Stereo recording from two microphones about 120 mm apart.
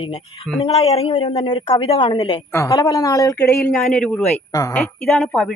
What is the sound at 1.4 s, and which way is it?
A woman's voice, 40° left (ahead or behind).